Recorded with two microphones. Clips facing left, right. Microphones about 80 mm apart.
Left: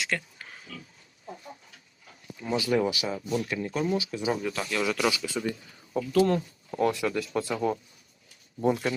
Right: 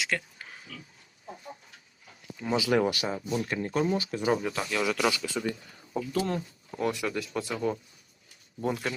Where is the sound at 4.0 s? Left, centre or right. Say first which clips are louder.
Right 2 dB; right.